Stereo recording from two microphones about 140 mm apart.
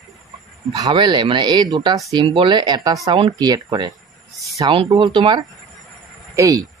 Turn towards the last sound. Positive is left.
turn(degrees=-25)  # may be behind; listen again after turning